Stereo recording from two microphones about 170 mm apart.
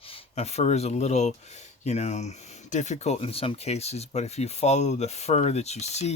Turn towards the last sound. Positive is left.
turn(degrees=40)  # may be behind; listen again after turning